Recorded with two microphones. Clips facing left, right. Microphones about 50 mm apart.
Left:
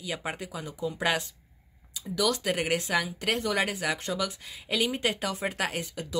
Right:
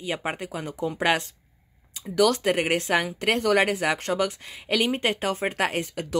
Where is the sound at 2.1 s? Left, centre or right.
Right.